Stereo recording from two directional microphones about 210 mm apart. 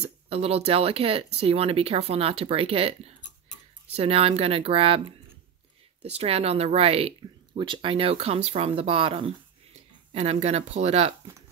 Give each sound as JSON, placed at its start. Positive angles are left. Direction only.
{"t": 0.3, "sound": "speech", "side_deg": -30}
{"t": 3.9, "sound": "speech", "side_deg": -30}